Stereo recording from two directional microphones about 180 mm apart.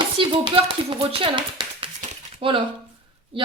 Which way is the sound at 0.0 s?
25° right (ahead or behind).